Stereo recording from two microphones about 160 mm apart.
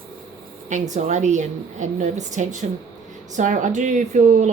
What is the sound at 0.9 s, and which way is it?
A woman's voice, 45° right (ahead or behind).